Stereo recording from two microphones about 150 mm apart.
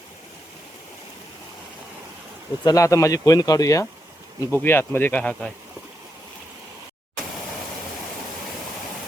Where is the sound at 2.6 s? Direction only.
20° left (ahead or behind).